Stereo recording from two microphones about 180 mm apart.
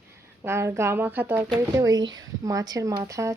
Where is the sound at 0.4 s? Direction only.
15° right (ahead or behind).